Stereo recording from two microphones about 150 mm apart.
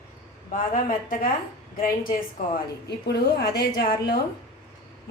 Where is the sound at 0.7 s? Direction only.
65° left (ahead or behind).